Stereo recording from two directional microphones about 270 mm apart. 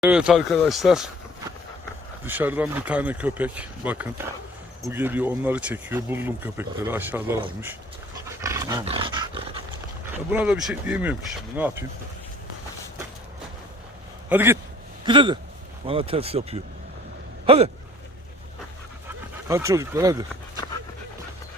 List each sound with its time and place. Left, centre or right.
0.0 s speech: centre
2.2 s speech: centre
8.4 s dog: centre
10.3 s speech: centre
14.3 s speech: centre
19.0 s speech: centre